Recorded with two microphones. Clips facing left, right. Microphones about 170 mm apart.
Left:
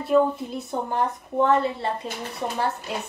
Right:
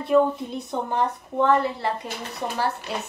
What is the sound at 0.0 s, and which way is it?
A woman's voice, centre (ahead or behind).